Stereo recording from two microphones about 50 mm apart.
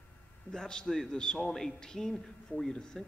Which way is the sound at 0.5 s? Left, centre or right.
Centre.